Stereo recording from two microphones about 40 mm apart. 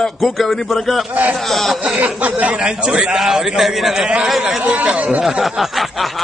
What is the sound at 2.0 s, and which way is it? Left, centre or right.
Speech, right.